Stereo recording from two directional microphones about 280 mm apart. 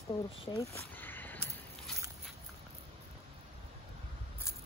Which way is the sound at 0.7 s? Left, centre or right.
Centre.